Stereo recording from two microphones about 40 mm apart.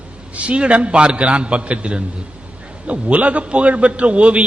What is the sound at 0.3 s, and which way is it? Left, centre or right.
A man's voice, right.